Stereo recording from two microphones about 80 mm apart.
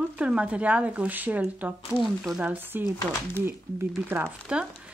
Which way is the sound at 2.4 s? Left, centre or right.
Centre.